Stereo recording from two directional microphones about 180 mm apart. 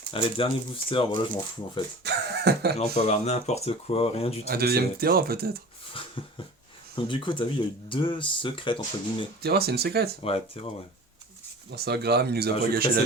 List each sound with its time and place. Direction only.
0.1 s speech: 30° left (ahead or behind)
2.0 s speech: 65° right (ahead or behind)
2.7 s speech: 35° left (ahead or behind)
4.4 s speech: 60° right (ahead or behind)
5.9 s dog: 30° left (ahead or behind)
6.9 s speech: 25° left (ahead or behind)
9.4 s speech: 60° right (ahead or behind)
10.2 s speech: 30° left (ahead or behind)
11.7 s speech: 65° right (ahead or behind)